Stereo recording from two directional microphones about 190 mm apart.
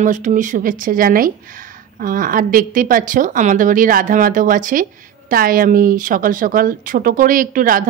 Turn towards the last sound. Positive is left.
turn(degrees=-45)  # may be behind; listen again after turning